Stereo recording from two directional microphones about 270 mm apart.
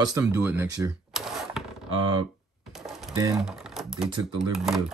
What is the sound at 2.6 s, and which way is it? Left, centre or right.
Typewriter, centre.